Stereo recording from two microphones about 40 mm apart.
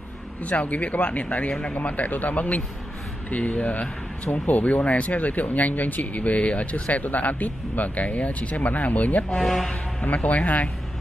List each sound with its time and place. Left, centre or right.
0.4 s speech: left
1.5 s speech: left
1.8 s speech: left
9.4 s speech: centre
10.0 s speech: left